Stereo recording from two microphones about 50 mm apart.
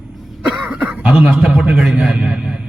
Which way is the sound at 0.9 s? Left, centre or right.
Right.